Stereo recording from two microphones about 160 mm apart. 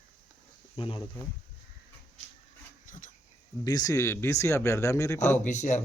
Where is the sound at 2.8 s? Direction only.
55° left (ahead or behind).